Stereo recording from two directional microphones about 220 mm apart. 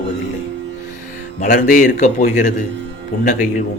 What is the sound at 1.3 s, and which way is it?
Speech, 35° left (ahead or behind).